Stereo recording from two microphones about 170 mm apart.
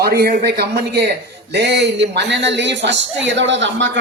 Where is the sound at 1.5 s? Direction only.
85° right.